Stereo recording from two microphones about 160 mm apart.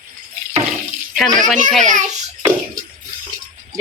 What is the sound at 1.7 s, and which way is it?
Speech, centre (ahead or behind).